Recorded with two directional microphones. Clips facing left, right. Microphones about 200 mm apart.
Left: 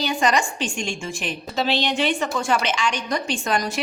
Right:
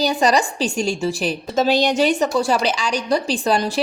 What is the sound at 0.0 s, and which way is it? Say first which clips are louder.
A woman's voice: right 4 dB; 35° right (ahead or behind).